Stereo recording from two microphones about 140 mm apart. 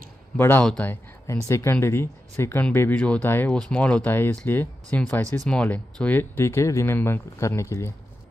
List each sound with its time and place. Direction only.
0.4 s speech: 15° left (ahead or behind)